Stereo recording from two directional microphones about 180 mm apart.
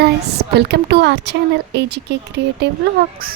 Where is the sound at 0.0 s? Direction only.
65° right (ahead or behind).